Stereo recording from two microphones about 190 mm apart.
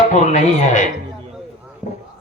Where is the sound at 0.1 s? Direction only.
40° left (ahead or behind).